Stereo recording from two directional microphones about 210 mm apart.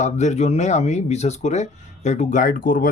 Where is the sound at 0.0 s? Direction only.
35° left (ahead or behind).